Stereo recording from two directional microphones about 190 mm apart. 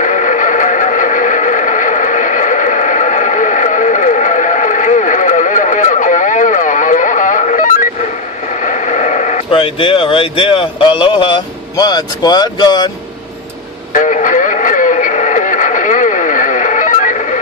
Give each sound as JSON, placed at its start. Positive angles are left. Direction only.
{"t": 0.0, "sound": "vehicle", "side_deg": 40}
{"t": 8.6, "sound": "speech", "side_deg": 40}
{"t": 13.9, "sound": "radio", "side_deg": 40}